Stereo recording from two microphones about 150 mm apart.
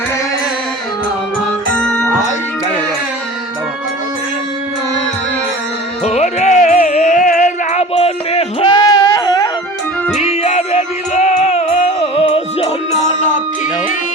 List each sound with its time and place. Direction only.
1.7 s music: 5° left (ahead or behind)
6.1 s music: 50° left (ahead or behind)
8.7 s a sound: 25° left (ahead or behind)
10.2 s music: 45° left (ahead or behind)